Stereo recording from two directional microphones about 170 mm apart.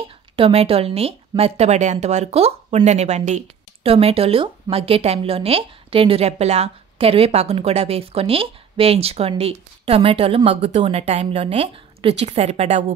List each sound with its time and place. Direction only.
0.4 s a woman's voice: 35° right (ahead or behind)